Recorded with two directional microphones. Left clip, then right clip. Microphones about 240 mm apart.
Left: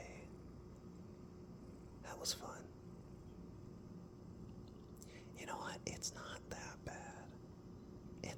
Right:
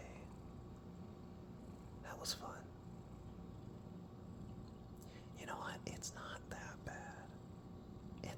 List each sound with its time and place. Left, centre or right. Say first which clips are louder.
2.0 s whispering: left 1 dB; centre
5.4 s whispering: even; centre